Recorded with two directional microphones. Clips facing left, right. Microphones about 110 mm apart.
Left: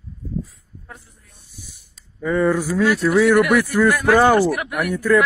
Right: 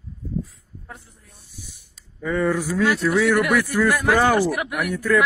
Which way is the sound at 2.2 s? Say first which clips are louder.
Left 3 dB; 35° left (ahead or behind).